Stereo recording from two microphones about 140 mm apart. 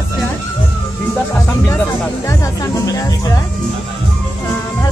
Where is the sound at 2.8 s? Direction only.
25° left (ahead or behind).